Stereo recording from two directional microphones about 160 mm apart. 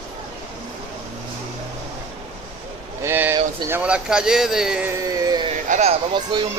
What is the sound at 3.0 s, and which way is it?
Speech, 15° right (ahead or behind).